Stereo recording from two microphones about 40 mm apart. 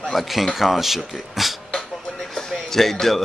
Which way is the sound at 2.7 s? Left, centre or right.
Centre.